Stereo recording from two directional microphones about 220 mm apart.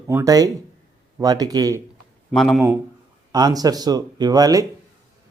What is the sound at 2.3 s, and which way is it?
Speech, centre (ahead or behind).